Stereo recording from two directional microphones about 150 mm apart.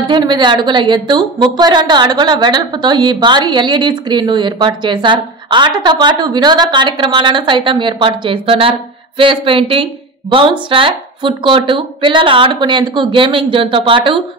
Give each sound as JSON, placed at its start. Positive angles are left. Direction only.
{"t": 0.1, "sound": "a woman's voice", "side_deg": -30}